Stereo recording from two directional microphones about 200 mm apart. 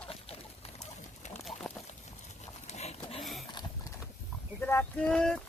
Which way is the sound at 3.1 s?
Centre (ahead or behind).